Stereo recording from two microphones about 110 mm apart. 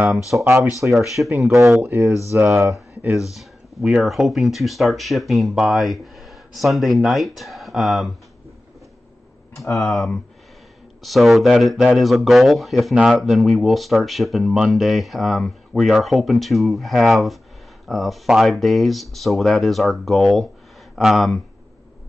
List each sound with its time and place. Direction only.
0.4 s speech: 25° right (ahead or behind)
0.9 s speech: centre (ahead or behind)
1.8 s speech: 25° right (ahead or behind)
3.3 s speech: 5° right (ahead or behind)
9.8 s speech: centre (ahead or behind)